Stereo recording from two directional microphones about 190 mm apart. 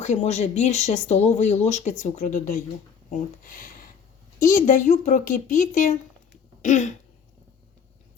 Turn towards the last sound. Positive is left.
turn(degrees=40)  # may be behind; listen again after turning